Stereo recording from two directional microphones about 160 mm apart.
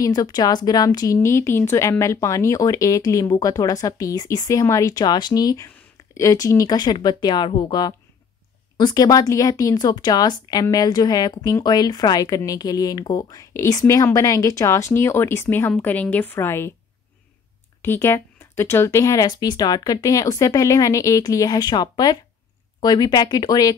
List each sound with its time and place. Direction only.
0.0 s speech: 25° left (ahead or behind)
17.8 s speech: 15° left (ahead or behind)